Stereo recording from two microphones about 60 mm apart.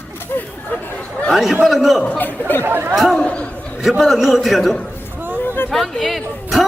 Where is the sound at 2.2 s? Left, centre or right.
Left.